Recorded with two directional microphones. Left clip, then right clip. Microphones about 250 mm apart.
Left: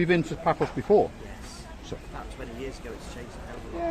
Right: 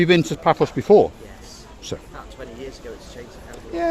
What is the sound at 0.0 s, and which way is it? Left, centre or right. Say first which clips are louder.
Speech: right 8 dB; right.